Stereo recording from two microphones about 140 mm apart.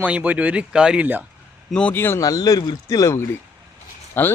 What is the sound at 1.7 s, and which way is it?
A man's voice, 10° left (ahead or behind).